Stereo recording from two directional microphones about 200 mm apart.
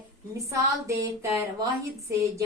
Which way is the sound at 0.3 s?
15° right (ahead or behind).